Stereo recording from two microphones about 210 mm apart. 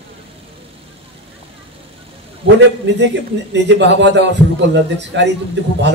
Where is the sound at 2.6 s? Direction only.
55° right (ahead or behind).